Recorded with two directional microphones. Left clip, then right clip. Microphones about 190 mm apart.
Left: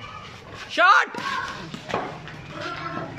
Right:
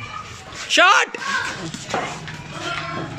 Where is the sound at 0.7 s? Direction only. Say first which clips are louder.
Right 3 dB; 5° right (ahead or behind).